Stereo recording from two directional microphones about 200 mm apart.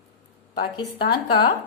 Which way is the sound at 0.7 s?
20° left (ahead or behind).